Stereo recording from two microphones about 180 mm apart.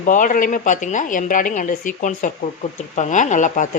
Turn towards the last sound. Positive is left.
turn(degrees=45)  # may be behind; listen again after turning